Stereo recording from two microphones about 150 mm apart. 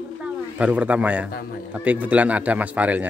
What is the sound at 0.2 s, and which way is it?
Speech, 10° right (ahead or behind).